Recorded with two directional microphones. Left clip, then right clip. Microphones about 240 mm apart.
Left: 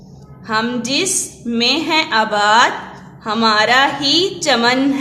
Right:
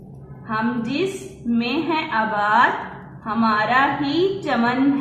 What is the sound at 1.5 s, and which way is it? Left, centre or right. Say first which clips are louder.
A woman's voice: left 6 dB; left.